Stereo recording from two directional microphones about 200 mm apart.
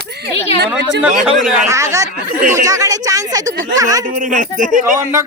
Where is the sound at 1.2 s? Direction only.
5° right (ahead or behind).